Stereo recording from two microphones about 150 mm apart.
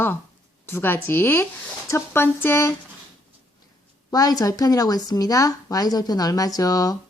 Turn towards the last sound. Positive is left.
turn(degrees=25)  # may be behind; listen again after turning